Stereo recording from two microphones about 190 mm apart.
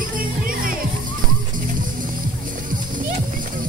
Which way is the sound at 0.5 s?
50° right (ahead or behind).